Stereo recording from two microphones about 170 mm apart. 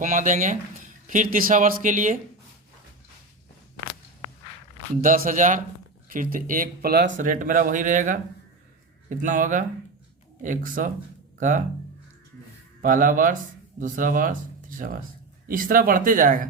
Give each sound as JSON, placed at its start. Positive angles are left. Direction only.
{"t": 0.0, "sound": "speech", "side_deg": -50}
{"t": 4.9, "sound": "speech", "side_deg": -55}
{"t": 7.2, "sound": "speech", "side_deg": -50}
{"t": 12.8, "sound": "speech", "side_deg": -50}